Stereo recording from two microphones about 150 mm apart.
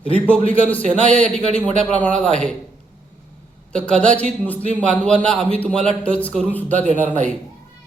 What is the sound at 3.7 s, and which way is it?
A man's voice, 5° left (ahead or behind).